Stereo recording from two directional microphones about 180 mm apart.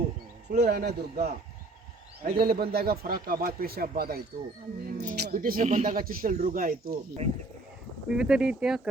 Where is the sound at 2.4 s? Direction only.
60° right (ahead or behind).